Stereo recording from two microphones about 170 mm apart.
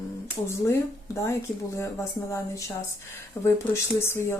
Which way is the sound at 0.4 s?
15° left (ahead or behind).